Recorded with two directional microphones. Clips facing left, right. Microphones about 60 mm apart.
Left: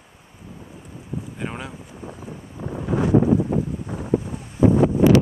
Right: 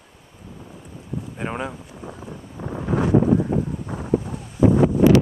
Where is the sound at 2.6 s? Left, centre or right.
Right.